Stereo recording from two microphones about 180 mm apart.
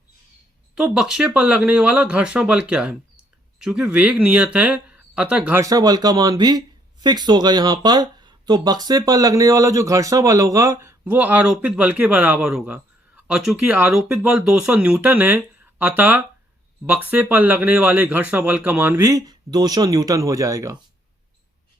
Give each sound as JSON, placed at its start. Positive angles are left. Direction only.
{"t": 0.8, "sound": "speech", "side_deg": -5}